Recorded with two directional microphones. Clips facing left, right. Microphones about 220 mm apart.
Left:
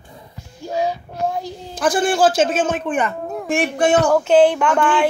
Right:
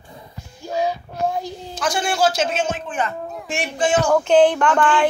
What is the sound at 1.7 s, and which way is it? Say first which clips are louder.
Speech: left 5 dB; 50° left (ahead or behind).